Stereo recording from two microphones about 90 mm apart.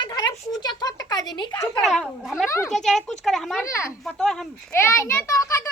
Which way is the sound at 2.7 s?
5° left (ahead or behind).